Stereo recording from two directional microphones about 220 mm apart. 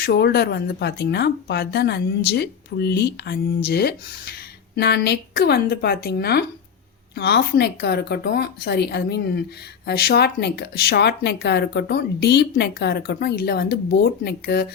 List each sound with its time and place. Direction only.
0.0 s speech: 45° left (ahead or behind)